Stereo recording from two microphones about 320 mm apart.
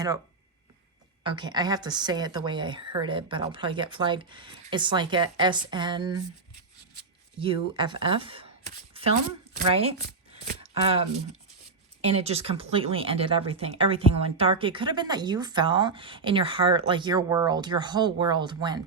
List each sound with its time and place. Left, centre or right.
1.2 s speech: centre
7.3 s speech: centre
8.9 s shuffling cards: centre
9.6 s speech: centre
10.3 s chopping: right
12.0 s speech: centre